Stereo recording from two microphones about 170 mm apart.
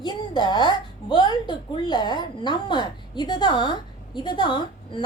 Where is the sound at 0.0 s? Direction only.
25° left (ahead or behind).